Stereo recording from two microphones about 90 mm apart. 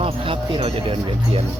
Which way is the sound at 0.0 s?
85° right.